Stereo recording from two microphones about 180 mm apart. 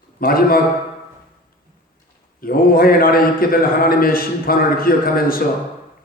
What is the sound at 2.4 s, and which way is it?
A man's voice, 55° left (ahead or behind).